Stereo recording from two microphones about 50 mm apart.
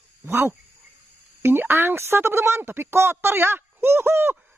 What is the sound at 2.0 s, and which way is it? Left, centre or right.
Speech, right.